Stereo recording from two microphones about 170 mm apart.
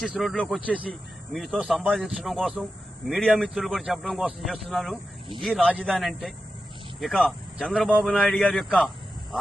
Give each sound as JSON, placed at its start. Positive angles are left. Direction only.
{"t": 0.0, "sound": "speech", "side_deg": 0}